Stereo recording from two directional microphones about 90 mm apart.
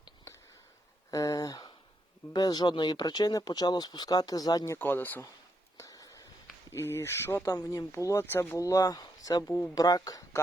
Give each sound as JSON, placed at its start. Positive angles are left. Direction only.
{"t": 1.1, "sound": "a sound", "side_deg": 40}
{"t": 2.3, "sound": "speech", "side_deg": 50}
{"t": 4.8, "sound": "speech", "side_deg": 20}
{"t": 5.7, "sound": "a sound", "side_deg": 35}
{"t": 6.7, "sound": "speech", "side_deg": 30}
{"t": 8.5, "sound": "speech", "side_deg": 40}